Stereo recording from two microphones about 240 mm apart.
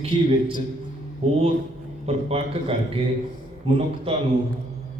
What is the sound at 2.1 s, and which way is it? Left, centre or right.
A man's voice, right.